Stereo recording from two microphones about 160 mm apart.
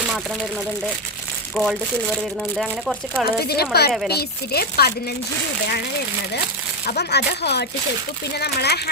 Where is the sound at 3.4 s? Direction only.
80° left.